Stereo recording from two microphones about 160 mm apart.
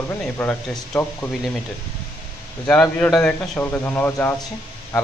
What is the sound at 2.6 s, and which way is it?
A man's voice, 10° left (ahead or behind).